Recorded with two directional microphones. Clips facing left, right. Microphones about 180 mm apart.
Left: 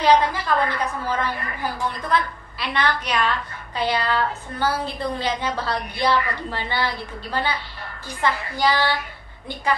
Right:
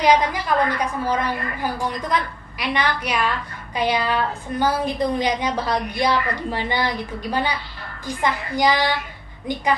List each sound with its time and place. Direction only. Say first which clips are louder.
0.0 s a woman's voice: even; 15° right (ahead or behind)